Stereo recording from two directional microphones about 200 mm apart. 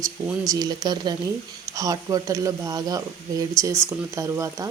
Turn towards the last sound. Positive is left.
turn(degrees=-15)  # may be behind; listen again after turning